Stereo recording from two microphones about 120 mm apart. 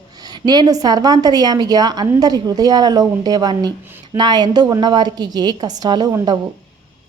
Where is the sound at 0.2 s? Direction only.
35° right (ahead or behind).